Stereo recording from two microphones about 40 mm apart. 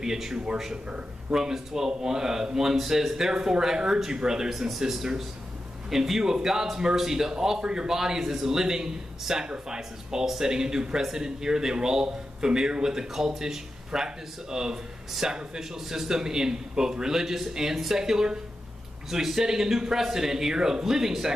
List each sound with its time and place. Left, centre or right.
0.0 s speech: centre